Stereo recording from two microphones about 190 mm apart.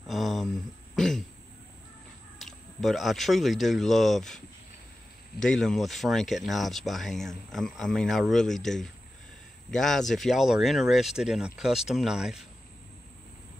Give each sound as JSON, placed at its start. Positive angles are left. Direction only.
{"t": 0.1, "sound": "a sound", "side_deg": 0}
{"t": 2.3, "sound": "speech", "side_deg": 0}
{"t": 5.4, "sound": "speech", "side_deg": 5}